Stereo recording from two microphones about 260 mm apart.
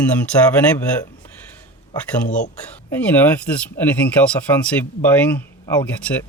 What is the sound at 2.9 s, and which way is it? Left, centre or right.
Speech, centre.